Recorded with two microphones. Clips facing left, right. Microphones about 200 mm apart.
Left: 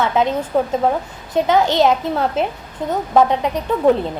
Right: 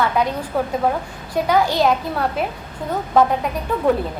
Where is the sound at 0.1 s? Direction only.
25° left (ahead or behind).